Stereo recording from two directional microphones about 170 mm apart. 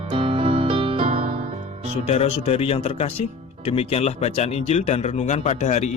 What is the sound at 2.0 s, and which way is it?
A man's voice, 40° left (ahead or behind).